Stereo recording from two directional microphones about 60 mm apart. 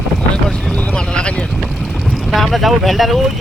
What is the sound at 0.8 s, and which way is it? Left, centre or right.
Boat, centre.